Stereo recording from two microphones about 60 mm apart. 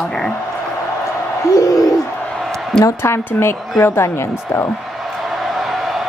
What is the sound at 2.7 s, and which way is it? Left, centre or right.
Speech, centre.